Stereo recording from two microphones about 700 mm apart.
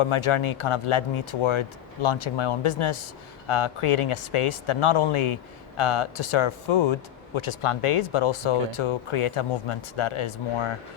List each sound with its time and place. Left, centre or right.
0.0 s speech: left